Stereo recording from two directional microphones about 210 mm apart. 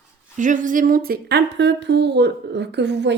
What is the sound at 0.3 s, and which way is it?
Speech, 35° right (ahead or behind).